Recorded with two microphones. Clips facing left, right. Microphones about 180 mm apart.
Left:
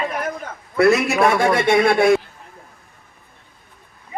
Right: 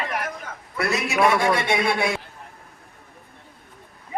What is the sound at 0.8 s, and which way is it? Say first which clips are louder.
A man's voice: left 6 dB; 50° left (ahead or behind).